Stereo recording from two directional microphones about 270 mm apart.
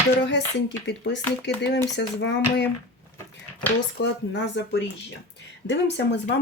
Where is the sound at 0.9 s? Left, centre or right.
Left.